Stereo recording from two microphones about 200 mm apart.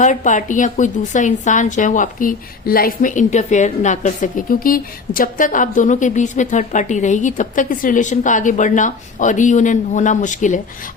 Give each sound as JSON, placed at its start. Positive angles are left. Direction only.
{"t": 0.0, "sound": "a woman's voice", "side_deg": 40}